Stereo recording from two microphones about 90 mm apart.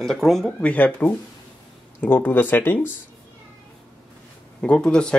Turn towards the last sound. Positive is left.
turn(degrees=10)  # may be behind; listen again after turning